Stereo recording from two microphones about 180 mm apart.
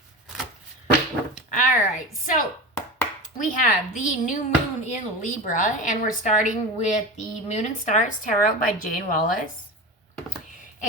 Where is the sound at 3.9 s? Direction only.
45° left (ahead or behind).